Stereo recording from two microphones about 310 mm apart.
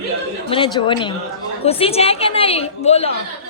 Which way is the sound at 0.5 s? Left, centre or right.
Centre.